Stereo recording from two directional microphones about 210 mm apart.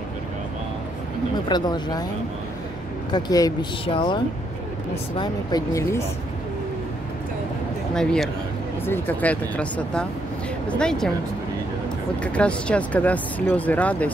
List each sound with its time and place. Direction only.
1.5 s speech: 20° left (ahead or behind)
3.1 s speech: 20° left (ahead or behind)
7.9 s speech: 5° left (ahead or behind)
12.2 s speech: 5° left (ahead or behind)